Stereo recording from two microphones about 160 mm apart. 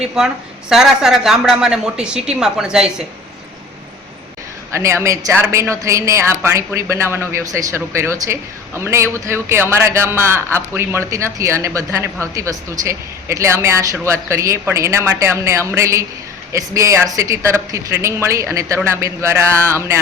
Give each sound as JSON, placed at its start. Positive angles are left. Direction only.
{"t": 0.0, "sound": "a woman's voice", "side_deg": -5}
{"t": 4.7, "sound": "a woman's voice", "side_deg": -15}